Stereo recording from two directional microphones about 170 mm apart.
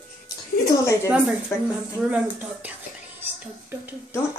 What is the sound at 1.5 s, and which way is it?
Speech, 15° left (ahead or behind).